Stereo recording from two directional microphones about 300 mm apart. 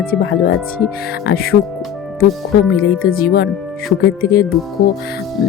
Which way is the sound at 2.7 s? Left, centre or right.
Left.